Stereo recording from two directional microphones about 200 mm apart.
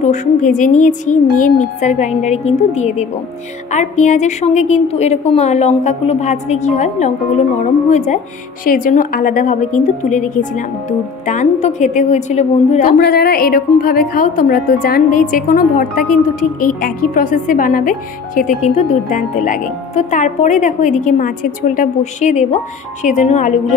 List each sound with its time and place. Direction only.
0.0 s a woman's voice: 35° left (ahead or behind)